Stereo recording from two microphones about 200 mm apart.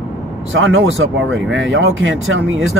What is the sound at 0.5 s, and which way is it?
Speech, 75° right (ahead or behind).